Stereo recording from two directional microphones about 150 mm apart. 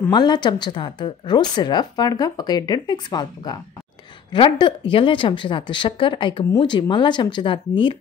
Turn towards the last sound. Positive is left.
turn(degrees=35)  # may be behind; listen again after turning